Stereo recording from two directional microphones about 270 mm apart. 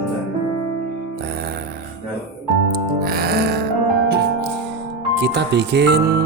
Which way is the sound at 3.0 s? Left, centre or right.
Right.